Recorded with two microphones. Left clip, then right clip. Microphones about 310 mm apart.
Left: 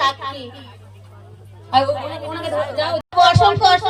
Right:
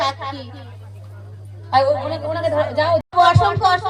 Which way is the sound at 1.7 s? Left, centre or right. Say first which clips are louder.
Even; centre.